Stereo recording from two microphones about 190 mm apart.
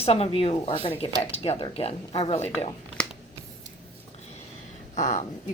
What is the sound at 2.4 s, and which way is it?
Speech, 5° left (ahead or behind).